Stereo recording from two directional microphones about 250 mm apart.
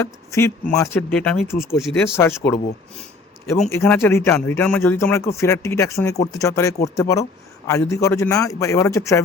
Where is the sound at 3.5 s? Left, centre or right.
Centre.